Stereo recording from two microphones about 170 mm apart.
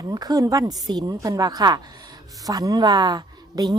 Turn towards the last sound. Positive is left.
turn(degrees=-25)  # may be behind; listen again after turning